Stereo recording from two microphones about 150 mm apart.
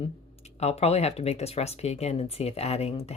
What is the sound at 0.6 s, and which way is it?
Speech, 45° left (ahead or behind).